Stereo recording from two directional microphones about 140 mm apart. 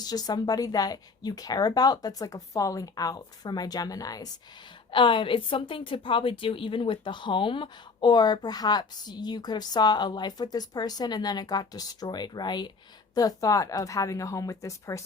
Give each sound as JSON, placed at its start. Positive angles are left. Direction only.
{"t": 0.0, "sound": "a woman's voice", "side_deg": 30}
{"t": 4.9, "sound": "a woman's voice", "side_deg": 35}